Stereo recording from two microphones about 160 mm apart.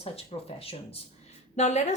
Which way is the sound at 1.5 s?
45° left (ahead or behind).